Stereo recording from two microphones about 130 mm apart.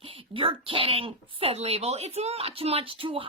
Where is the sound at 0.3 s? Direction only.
45° right (ahead or behind).